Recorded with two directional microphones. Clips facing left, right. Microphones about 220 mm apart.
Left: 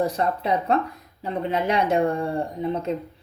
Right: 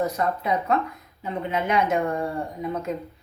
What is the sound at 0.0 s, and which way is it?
Speech, 30° left (ahead or behind).